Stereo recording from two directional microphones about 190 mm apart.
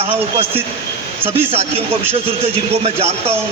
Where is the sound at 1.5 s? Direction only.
30° right (ahead or behind).